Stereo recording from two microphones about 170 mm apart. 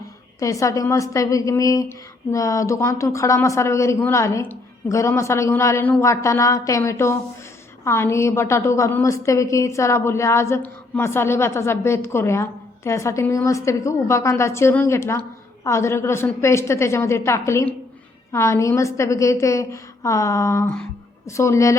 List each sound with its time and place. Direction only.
0.3 s a woman's voice: 20° left (ahead or behind)